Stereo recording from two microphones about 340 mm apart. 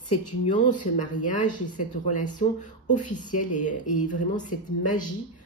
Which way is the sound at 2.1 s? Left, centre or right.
Left.